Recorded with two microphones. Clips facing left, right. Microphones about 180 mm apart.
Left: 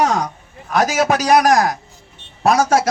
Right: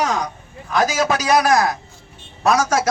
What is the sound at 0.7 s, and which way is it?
A man's voice, 45° left (ahead or behind).